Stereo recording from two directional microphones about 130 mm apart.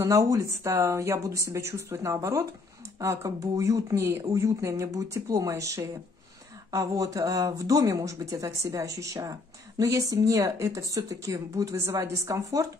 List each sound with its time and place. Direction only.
0.0 s speech: 25° right (ahead or behind)